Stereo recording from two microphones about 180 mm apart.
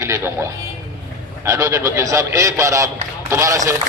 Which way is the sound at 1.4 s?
15° right (ahead or behind).